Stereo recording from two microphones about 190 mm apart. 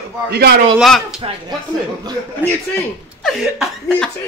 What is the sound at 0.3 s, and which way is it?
Speech, 60° right (ahead or behind).